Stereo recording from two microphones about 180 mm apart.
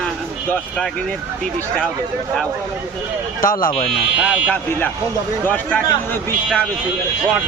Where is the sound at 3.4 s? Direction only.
50° left (ahead or behind).